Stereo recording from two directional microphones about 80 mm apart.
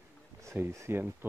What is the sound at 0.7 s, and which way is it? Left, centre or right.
Speech, right.